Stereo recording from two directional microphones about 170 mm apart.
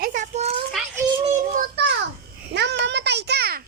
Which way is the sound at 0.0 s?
50° right (ahead or behind).